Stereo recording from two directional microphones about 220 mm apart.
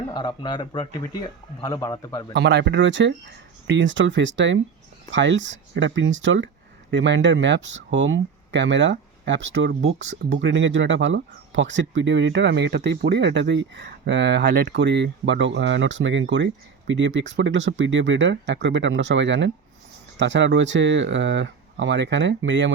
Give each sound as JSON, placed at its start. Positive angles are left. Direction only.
{"t": 0.1, "sound": "speech", "side_deg": 20}
{"t": 2.3, "sound": "speech", "side_deg": -50}